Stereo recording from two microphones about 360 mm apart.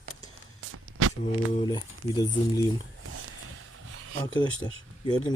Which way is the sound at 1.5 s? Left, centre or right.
Centre.